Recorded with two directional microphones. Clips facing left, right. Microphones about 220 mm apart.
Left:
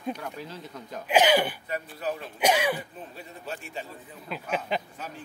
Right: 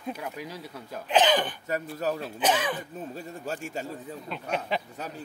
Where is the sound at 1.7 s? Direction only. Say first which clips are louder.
Right 3 dB; 45° right (ahead or behind).